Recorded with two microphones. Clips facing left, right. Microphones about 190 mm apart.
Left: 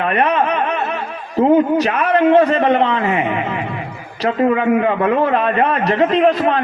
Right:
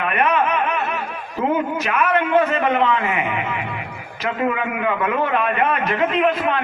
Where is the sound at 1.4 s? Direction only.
35° left (ahead or behind).